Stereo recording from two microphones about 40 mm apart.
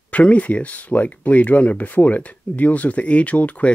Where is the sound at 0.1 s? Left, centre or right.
Left.